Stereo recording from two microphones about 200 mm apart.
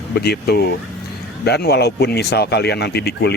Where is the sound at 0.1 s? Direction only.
55° left (ahead or behind).